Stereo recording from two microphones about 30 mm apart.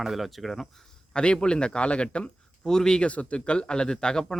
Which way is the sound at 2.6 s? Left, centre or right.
Left.